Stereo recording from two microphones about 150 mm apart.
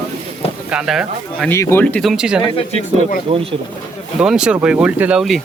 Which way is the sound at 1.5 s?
15° left (ahead or behind).